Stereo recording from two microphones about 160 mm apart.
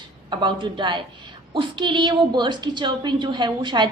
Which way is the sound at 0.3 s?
30° right (ahead or behind).